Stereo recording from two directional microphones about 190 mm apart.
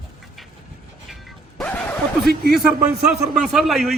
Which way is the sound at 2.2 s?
55° right (ahead or behind).